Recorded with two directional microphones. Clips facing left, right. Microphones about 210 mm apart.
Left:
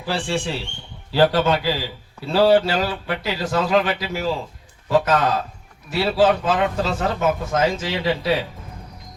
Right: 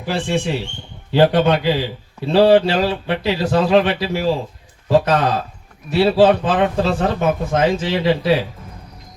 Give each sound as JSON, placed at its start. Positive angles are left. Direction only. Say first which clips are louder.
{"t": 0.0, "sound": "a man's voice", "louder": "right 4 dB", "side_deg": -15}